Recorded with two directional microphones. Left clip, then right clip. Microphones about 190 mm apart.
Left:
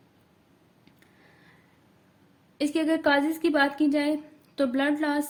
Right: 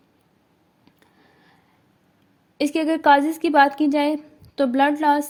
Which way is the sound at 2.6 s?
30° right (ahead or behind).